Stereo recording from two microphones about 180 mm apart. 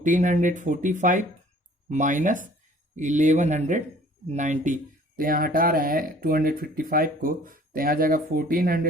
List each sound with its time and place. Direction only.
0.0 s speech: 45° right (ahead or behind)